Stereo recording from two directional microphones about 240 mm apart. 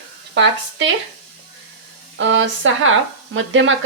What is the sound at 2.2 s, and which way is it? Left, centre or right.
Speech, right.